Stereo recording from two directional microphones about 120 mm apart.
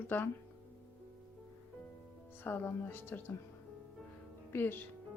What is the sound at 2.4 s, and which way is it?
Speech, 15° left (ahead or behind).